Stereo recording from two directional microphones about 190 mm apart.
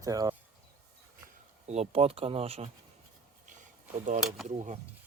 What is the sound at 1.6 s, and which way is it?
Speech, 35° right (ahead or behind).